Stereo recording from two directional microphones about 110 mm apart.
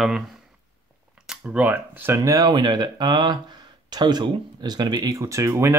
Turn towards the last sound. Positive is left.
turn(degrees=-25)  # may be behind; listen again after turning